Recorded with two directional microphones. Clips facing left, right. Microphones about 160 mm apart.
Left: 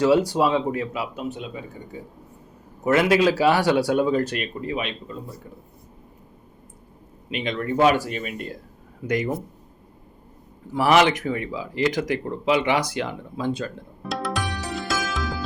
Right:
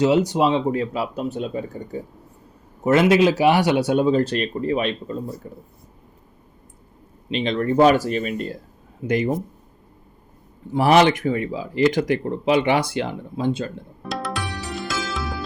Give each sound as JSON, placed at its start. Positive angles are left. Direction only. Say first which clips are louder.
{"t": 0.0, "sound": "speech", "louder": "right 1 dB", "side_deg": -20}
{"t": 2.8, "sound": "speech", "louder": "right 3 dB", "side_deg": -25}
{"t": 7.3, "sound": "speech", "louder": "right 5 dB", "side_deg": -30}
{"t": 10.7, "sound": "speech", "louder": "right 3 dB", "side_deg": -30}
{"t": 14.0, "sound": "music", "louder": "left 1 dB", "side_deg": 0}